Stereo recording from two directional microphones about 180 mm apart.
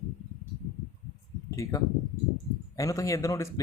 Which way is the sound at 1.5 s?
15° left (ahead or behind).